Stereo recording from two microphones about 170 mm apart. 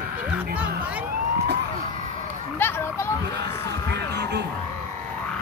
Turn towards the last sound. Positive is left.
turn(degrees=-80)